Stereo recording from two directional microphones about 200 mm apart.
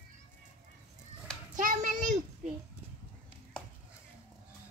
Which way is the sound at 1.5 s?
40° right (ahead or behind).